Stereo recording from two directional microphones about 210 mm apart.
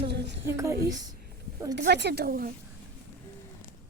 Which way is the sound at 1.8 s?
55° right (ahead or behind).